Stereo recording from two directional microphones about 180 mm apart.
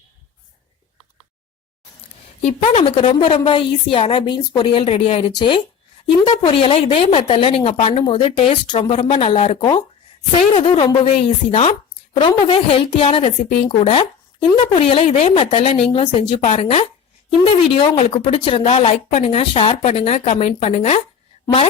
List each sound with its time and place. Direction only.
2.4 s a woman's voice: 40° left (ahead or behind)